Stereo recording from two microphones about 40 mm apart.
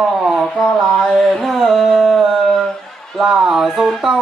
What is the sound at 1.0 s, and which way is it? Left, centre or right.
Mantra, centre.